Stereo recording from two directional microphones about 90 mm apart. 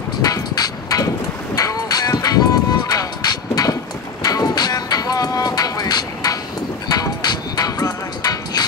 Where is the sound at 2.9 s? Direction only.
45° left (ahead or behind).